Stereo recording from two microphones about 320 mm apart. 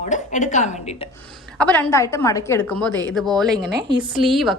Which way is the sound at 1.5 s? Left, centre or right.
Centre.